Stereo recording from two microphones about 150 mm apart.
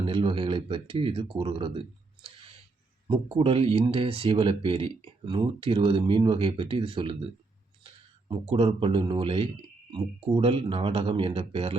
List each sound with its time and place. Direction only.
0.0 s speech: 35° right (ahead or behind)
3.1 s speech: 35° right (ahead or behind)
8.3 s speech: 35° right (ahead or behind)